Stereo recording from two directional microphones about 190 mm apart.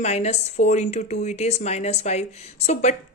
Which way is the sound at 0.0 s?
35° left (ahead or behind).